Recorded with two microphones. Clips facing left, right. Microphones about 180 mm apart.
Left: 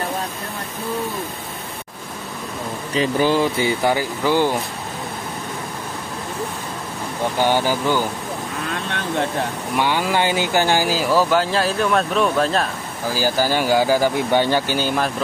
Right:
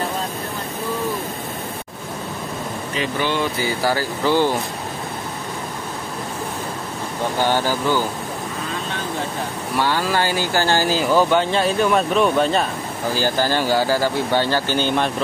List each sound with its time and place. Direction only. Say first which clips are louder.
2.9 s speech: left 5 dB; 35° left (ahead or behind); by 4.6 s 15° left (ahead or behind)
7.3 s speech: left 1 dB; 15° left (ahead or behind)
9.8 s speech: left 1 dB; 15° left (ahead or behind)